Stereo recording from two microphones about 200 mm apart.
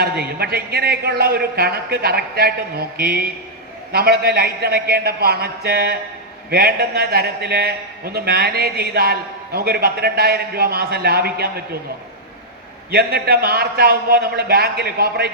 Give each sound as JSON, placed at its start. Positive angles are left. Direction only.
{"t": 0.0, "sound": "a man's voice", "side_deg": -50}
{"t": 12.9, "sound": "a man's voice", "side_deg": -50}